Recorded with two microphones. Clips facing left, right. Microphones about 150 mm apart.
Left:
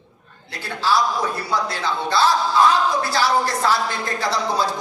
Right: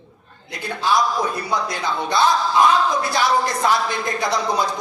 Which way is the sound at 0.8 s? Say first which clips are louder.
Even; 20° right (ahead or behind).